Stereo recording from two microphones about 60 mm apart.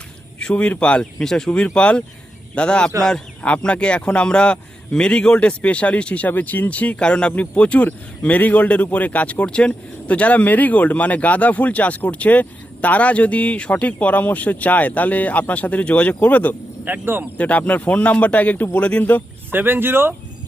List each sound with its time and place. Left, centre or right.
0.3 s a man's voice: centre
1.5 s a man's voice: centre
16.8 s speech: right
17.3 s speech: left
19.5 s speech: right